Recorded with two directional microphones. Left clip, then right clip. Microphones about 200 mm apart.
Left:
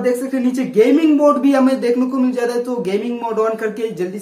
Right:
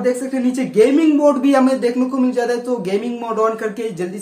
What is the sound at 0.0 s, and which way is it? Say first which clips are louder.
Speech: left 1 dB; centre (ahead or behind).